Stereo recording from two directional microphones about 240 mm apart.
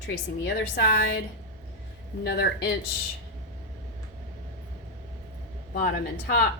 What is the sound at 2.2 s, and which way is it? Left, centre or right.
Speech, left.